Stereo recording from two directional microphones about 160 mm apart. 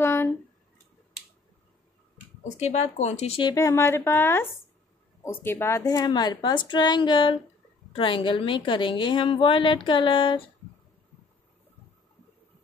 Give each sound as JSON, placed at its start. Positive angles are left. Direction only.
{"t": 0.0, "sound": "a sound", "side_deg": 15}
{"t": 2.4, "sound": "speech", "side_deg": 45}
{"t": 3.4, "sound": "a woman's voice", "side_deg": 20}